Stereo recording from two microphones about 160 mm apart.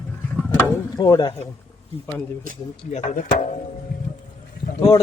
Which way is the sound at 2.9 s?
50° left (ahead or behind).